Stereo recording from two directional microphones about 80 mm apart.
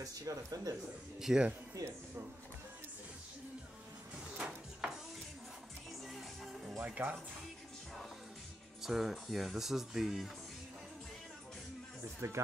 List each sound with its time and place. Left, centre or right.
0.0 s speech: right
1.2 s speech: centre
1.8 s music: right
4.4 s a sound: centre
6.0 s music: centre
7.0 s speech: right
8.8 s speech: centre
12.2 s speech: right